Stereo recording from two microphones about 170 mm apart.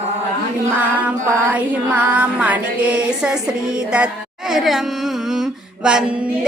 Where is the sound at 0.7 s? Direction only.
10° right (ahead or behind).